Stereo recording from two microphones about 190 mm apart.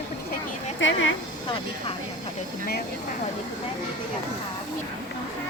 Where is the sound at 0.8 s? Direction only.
80° left.